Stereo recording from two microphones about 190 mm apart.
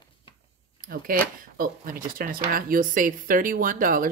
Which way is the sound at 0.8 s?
50° right (ahead or behind).